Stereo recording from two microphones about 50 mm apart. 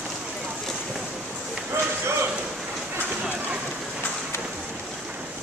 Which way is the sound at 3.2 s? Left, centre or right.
Centre.